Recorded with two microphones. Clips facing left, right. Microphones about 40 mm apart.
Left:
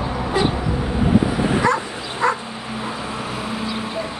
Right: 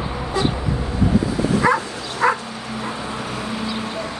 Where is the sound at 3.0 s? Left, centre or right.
Left.